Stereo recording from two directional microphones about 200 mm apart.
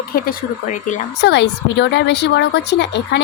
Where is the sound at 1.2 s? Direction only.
60° left (ahead or behind).